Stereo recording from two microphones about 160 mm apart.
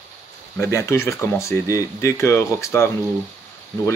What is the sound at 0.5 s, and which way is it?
Speech, 15° left (ahead or behind).